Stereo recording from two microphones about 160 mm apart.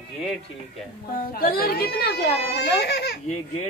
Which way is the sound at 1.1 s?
65° left (ahead or behind).